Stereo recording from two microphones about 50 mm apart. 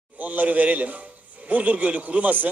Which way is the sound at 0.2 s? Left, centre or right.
Right.